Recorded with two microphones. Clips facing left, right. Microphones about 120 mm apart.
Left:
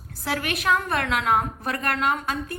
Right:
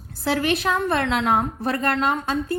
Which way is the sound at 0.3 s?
30° right (ahead or behind).